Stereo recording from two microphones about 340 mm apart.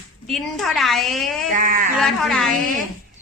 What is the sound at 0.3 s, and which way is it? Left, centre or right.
A woman's voice, centre.